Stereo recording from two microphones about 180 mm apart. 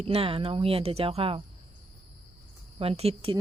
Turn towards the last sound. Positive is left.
turn(degrees=-30)  # may be behind; listen again after turning